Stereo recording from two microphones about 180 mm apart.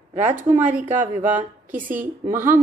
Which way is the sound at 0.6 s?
45° right (ahead or behind).